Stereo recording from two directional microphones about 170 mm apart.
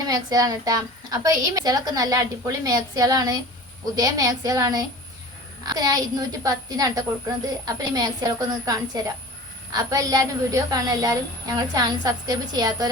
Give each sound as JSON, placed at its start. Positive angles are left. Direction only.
{"t": 0.0, "sound": "a woman's voice", "side_deg": -20}